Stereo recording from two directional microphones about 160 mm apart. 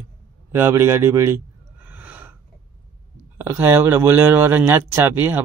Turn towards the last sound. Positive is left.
turn(degrees=-15)  # may be behind; listen again after turning